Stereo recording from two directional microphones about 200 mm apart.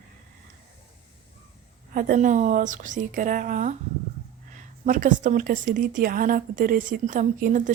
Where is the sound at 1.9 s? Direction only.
40° right (ahead or behind).